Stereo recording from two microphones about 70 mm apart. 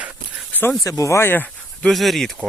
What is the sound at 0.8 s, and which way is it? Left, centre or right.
Speech, left.